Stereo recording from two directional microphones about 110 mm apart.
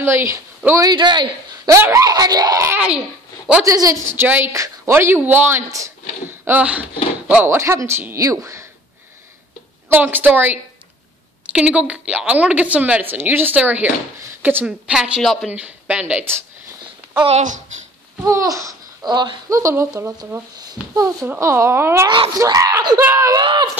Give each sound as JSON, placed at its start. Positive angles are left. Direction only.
{"t": 0.0, "sound": "speech", "side_deg": -25}
{"t": 1.7, "sound": "speech", "side_deg": -30}
{"t": 5.7, "sound": "speech", "side_deg": -30}
{"t": 9.8, "sound": "a woman's voice", "side_deg": -15}
{"t": 17.3, "sound": "speech", "side_deg": -90}
{"t": 18.2, "sound": "speech", "side_deg": -30}
{"t": 19.5, "sound": "speech", "side_deg": -25}
{"t": 22.4, "sound": "speech", "side_deg": -35}
{"t": 22.9, "sound": "speech", "side_deg": -25}
{"t": 23.4, "sound": "a sound", "side_deg": -45}